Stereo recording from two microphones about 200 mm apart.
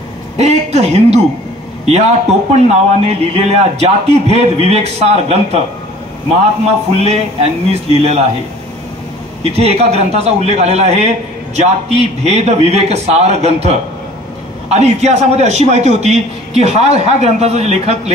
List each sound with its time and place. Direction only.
0.4 s a man's voice: 30° right (ahead or behind)
7.1 s a man's voice: 30° right (ahead or behind)
9.4 s a man's voice: 30° right (ahead or behind)